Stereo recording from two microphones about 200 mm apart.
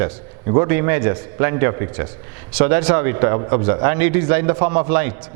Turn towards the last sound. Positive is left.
turn(degrees=-10)  # may be behind; listen again after turning